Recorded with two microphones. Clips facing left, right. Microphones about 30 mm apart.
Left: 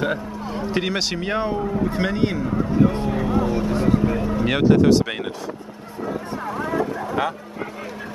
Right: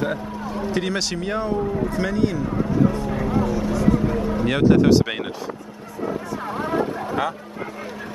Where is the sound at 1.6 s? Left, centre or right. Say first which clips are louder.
Even; centre.